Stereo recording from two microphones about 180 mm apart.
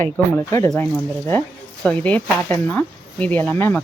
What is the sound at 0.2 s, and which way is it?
Speech, 10° left (ahead or behind).